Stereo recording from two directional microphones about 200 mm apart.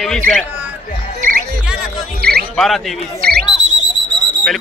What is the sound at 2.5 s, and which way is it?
Speech, centre (ahead or behind).